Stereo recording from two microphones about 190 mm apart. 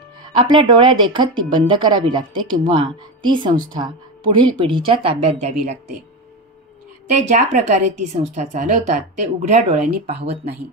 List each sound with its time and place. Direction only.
0.2 s speech: 25° right (ahead or behind)
7.2 s a woman's voice: 40° right (ahead or behind)